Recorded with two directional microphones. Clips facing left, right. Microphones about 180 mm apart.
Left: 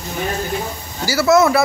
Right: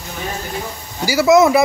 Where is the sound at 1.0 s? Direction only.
15° right (ahead or behind).